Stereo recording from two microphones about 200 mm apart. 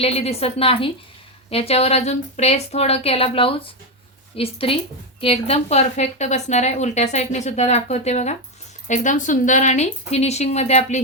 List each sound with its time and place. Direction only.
0.0 s a woman's voice: 30° left (ahead or behind)